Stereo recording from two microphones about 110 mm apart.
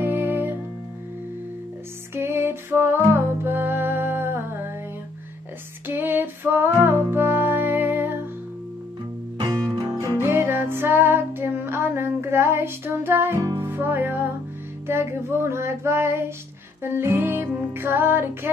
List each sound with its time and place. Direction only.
0.0 s music: 20° right (ahead or behind)
2.1 s music: 20° right (ahead or behind)
5.9 s music: 20° right (ahead or behind)
9.5 s music: 35° right (ahead or behind)
10.2 s music: 20° right (ahead or behind)